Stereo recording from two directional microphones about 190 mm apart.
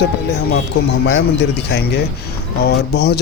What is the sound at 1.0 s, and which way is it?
Speech, 65° left (ahead or behind).